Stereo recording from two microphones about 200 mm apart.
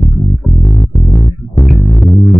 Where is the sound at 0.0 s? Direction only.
Centre (ahead or behind).